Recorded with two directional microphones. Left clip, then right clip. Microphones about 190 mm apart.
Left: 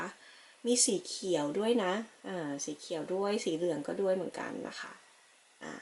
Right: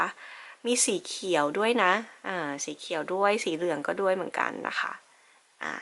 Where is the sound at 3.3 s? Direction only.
10° right (ahead or behind).